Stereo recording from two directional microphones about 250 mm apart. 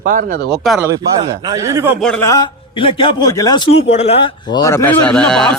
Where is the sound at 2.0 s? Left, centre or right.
Centre.